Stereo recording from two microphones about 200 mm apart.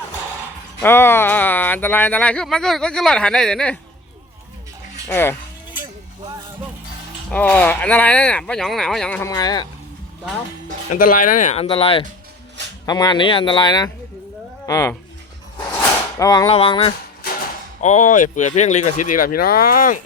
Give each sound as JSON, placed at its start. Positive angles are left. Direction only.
{"t": 0.8, "sound": "speech", "side_deg": 10}
{"t": 5.0, "sound": "speech", "side_deg": 10}
{"t": 7.3, "sound": "speech", "side_deg": 5}
{"t": 9.3, "sound": "speech", "side_deg": 20}
{"t": 10.9, "sound": "speech", "side_deg": 45}
{"t": 16.1, "sound": "speech", "side_deg": 20}
{"t": 17.8, "sound": "speech", "side_deg": 40}